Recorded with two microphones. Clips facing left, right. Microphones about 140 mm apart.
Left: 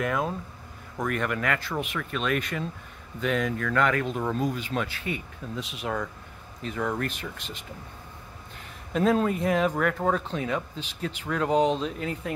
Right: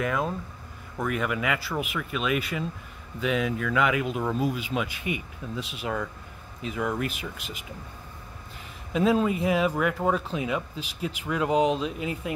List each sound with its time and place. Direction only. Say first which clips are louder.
0.0 s speech: even; centre (ahead or behind)
5.6 s speech: even; centre (ahead or behind)
8.9 s speech: even; 5° right (ahead or behind)